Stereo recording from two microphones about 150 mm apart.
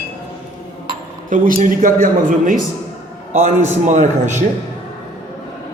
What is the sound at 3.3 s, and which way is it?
A man's voice, 55° right (ahead or behind).